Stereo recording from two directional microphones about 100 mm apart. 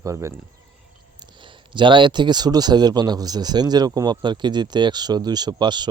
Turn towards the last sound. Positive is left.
turn(degrees=-50)  # may be behind; listen again after turning